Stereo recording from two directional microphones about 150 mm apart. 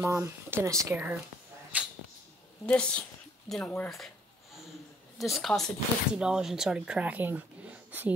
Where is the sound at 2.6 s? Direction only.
10° left (ahead or behind).